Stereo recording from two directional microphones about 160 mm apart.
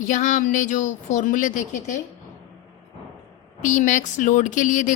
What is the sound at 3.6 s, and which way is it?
A woman's voice, 55° left (ahead or behind).